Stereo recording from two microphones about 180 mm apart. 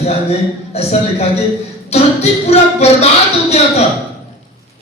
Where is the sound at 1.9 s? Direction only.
35° left (ahead or behind).